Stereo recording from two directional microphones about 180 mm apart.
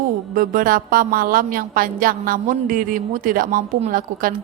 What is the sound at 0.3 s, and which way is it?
A woman's voice, 50° right (ahead or behind).